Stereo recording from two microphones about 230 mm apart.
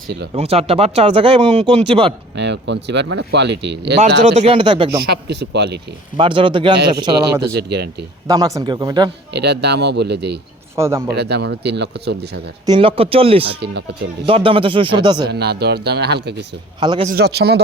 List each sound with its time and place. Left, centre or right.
0.3 s speech: right
2.3 s speech: right
4.4 s speech: right
5.0 s speech: right
6.1 s speech: right
7.5 s speech: right
8.3 s a man's voice: centre
9.3 s speech: right
10.8 s a man's voice: centre
11.1 s speech: right
12.6 s speech: right
15.3 s speech: right
16.8 s speech: centre
17.1 s speech: right